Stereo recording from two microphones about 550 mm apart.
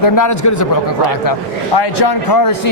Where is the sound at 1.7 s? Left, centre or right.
Left.